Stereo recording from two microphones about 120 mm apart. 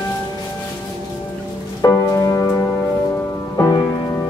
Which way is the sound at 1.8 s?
25° left (ahead or behind).